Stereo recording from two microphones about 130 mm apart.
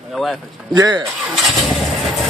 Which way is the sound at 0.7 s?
35° right (ahead or behind).